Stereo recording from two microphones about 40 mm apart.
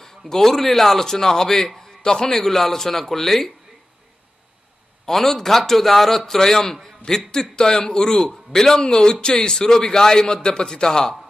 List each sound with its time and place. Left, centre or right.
0.3 s a man's voice: centre
5.0 s a man's voice: centre